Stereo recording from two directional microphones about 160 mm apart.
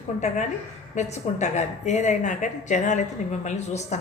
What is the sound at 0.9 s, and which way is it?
Speech, 45° left (ahead or behind).